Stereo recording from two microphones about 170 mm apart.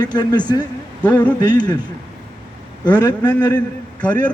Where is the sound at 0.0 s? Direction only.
25° left (ahead or behind).